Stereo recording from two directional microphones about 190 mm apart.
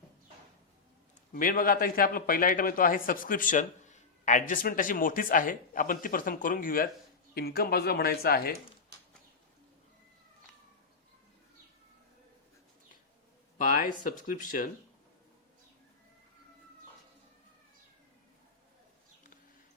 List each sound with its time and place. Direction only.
1.3 s a man's voice: 45° left (ahead or behind)
13.6 s a man's voice: 45° left (ahead or behind)